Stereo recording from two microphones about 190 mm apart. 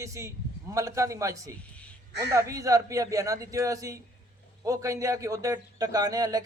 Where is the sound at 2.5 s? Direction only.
15° right (ahead or behind).